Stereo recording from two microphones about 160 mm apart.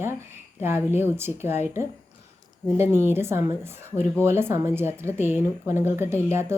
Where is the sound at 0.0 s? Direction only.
15° right (ahead or behind).